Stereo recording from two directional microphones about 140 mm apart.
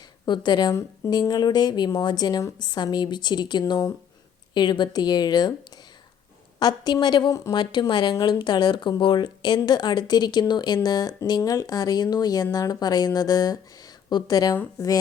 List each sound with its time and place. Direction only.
0.3 s a woman's voice: 30° left (ahead or behind)
6.6 s a woman's voice: 30° left (ahead or behind)